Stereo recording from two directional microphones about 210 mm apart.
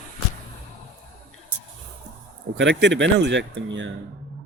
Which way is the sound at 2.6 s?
60° right (ahead or behind).